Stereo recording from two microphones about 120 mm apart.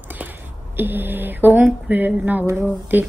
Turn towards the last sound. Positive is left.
turn(degrees=-15)  # may be behind; listen again after turning